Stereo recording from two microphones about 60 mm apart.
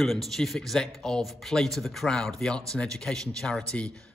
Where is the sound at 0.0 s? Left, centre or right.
Centre.